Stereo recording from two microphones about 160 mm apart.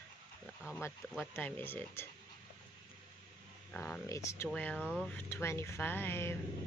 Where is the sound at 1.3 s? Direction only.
10° left (ahead or behind).